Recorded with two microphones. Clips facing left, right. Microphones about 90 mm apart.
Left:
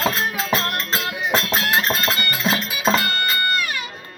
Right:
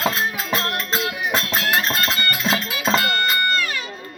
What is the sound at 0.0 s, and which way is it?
Music, 5° right (ahead or behind).